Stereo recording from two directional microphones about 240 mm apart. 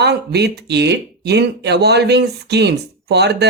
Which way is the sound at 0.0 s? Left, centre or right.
Right.